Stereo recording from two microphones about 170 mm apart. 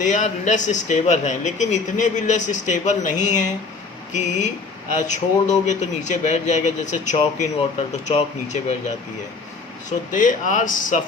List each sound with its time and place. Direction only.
0.0 s speech: 45° left (ahead or behind)
10.1 s speech: 50° left (ahead or behind)